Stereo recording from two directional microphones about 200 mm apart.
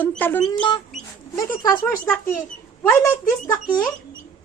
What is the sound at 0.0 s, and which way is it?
Speech, 10° left (ahead or behind).